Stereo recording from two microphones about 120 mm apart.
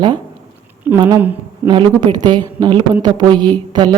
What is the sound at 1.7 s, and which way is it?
A woman's voice, 45° right (ahead or behind).